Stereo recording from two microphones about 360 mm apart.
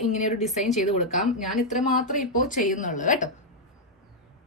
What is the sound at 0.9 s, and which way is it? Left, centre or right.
Speech, centre.